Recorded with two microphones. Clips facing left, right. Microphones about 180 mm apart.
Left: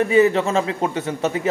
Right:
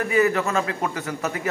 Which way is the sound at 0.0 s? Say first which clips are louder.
Left 5 dB; 25° left (ahead or behind).